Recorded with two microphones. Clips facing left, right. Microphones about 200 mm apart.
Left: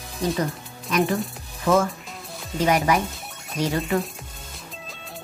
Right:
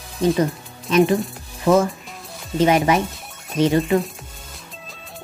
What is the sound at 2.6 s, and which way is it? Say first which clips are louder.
Speech: right 4 dB; 25° right (ahead or behind).